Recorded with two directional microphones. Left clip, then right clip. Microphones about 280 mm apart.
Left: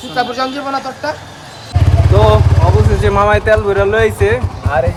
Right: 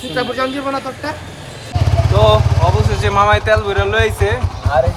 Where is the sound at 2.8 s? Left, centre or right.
Left.